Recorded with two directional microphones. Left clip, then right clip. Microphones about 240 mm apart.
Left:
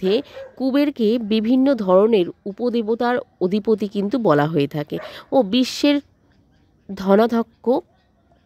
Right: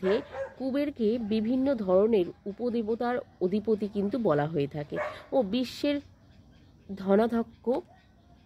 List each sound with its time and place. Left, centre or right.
0.0 s speech: left